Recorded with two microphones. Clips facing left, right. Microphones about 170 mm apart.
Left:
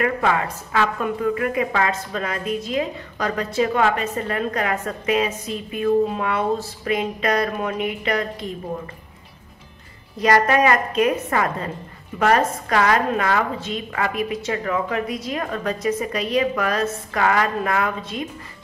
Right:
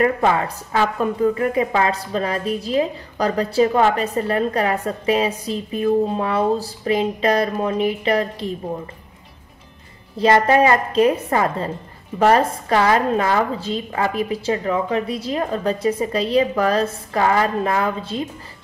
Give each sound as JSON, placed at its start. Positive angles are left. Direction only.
{"t": 0.0, "sound": "a woman's voice", "side_deg": -30}
{"t": 10.1, "sound": "a woman's voice", "side_deg": -30}